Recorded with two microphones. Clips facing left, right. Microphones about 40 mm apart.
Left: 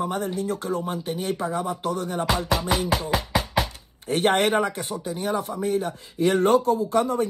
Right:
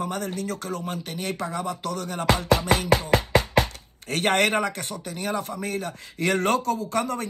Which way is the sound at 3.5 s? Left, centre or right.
Right.